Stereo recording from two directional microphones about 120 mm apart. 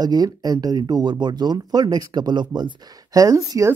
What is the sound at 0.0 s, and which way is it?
Speech, 35° right (ahead or behind).